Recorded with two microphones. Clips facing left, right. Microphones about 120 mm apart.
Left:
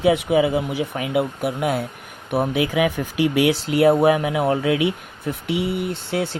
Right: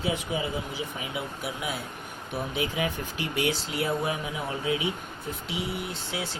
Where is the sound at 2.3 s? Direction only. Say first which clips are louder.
Left 10 dB; 70° left (ahead or behind).